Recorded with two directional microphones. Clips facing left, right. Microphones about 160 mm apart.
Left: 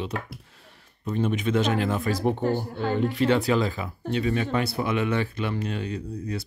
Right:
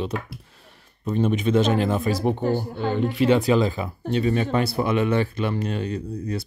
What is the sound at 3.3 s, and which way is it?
Speech, 20° right (ahead or behind).